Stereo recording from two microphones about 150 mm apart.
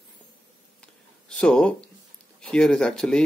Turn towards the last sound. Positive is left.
turn(degrees=5)  # may be behind; listen again after turning